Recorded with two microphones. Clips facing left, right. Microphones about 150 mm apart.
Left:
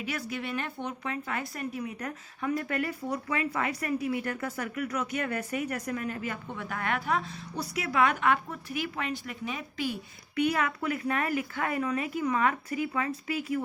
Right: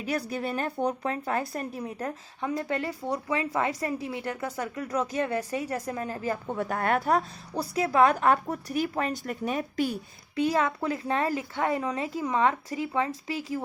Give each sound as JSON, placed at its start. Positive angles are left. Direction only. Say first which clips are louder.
{"t": 0.0, "sound": "speech", "louder": "right 4 dB", "side_deg": -35}
{"t": 10.3, "sound": "speech", "louder": "right 2 dB", "side_deg": -30}